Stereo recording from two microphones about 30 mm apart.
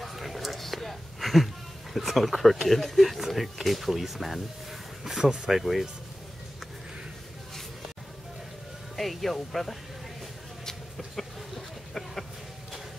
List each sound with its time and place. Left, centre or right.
0.0 s a sound: centre
2.0 s speech: centre
5.0 s speech: centre
5.5 s speech: centre
8.9 s speech: centre
11.1 s a sound: centre